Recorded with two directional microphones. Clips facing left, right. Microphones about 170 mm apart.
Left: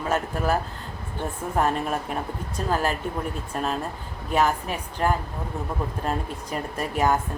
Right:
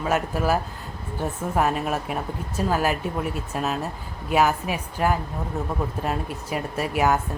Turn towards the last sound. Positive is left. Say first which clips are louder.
# right 1 dB
turn(degrees=-10)  # may be behind; listen again after turning